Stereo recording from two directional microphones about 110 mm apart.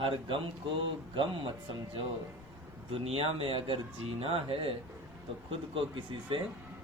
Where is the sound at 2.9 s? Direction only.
60° right (ahead or behind).